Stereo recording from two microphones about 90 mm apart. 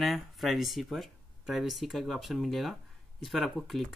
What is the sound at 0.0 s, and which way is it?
Speech, centre (ahead or behind).